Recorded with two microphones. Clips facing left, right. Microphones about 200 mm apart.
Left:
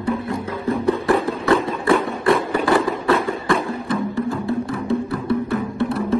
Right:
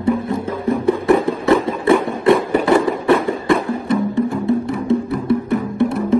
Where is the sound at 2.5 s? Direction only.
20° right (ahead or behind).